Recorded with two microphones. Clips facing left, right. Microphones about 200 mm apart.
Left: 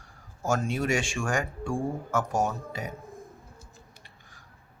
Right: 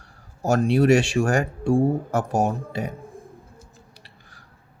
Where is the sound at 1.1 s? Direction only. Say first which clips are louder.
Right 8 dB; 35° right (ahead or behind).